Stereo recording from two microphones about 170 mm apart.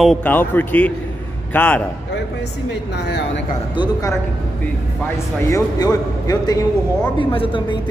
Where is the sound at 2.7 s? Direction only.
90° left.